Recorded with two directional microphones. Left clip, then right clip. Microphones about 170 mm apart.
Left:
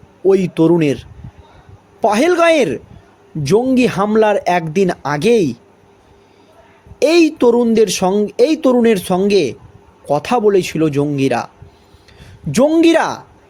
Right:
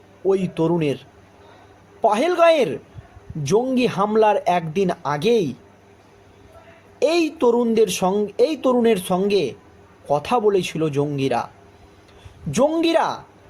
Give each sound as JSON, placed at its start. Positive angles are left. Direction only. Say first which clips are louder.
{"t": 0.3, "sound": "speech", "louder": "left 8 dB", "side_deg": 40}
{"t": 7.0, "sound": "speech", "louder": "left 7 dB", "side_deg": 45}